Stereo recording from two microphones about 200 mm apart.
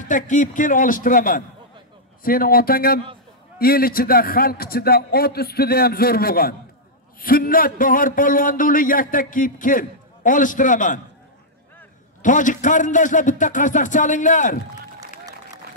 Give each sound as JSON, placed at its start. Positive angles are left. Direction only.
{"t": 0.0, "sound": "a man's voice", "side_deg": 40}
{"t": 12.2, "sound": "a man's voice", "side_deg": 40}
{"t": 15.0, "sound": "applause", "side_deg": -20}